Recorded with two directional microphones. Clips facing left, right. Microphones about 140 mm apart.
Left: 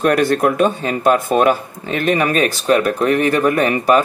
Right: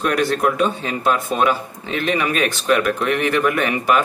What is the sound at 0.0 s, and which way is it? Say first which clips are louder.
Speech: left 4 dB; 50° left (ahead or behind).